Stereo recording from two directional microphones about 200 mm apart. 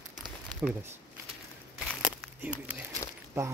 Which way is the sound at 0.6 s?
10° right (ahead or behind).